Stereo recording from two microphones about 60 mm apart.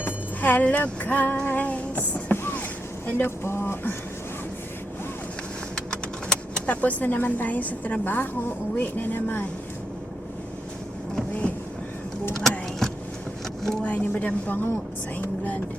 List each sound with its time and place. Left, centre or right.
0.0 s music: left
2.3 s boat: left
3.1 s a woman's voice: left
5.7 s vehicle: centre
6.7 s a woman's voice: left
12.3 s vehicle: centre
13.8 s speech: left